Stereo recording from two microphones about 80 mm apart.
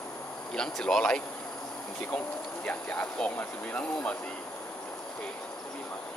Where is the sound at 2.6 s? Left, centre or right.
Centre.